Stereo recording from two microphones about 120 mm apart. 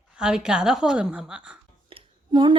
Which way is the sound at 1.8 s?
45° right (ahead or behind).